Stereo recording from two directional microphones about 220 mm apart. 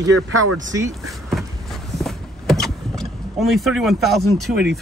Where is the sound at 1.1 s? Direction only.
Centre (ahead or behind).